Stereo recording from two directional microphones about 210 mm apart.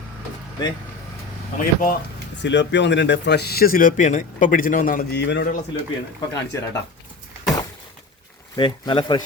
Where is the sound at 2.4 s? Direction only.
60° left (ahead or behind).